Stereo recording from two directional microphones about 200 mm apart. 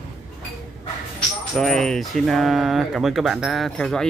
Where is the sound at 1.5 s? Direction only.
Centre (ahead or behind).